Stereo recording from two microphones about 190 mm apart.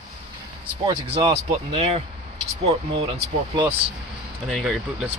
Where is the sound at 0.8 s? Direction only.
25° right (ahead or behind).